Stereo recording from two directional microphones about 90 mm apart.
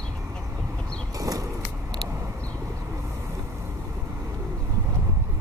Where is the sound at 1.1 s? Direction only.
40° right (ahead or behind).